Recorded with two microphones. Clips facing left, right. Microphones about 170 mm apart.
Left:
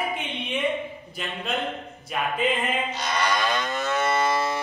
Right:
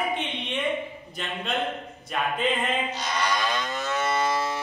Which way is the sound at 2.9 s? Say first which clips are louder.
Left 2 dB; 60° left (ahead or behind).